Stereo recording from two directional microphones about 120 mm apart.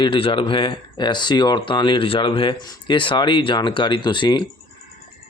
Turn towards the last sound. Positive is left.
turn(degrees=40)  # may be behind; listen again after turning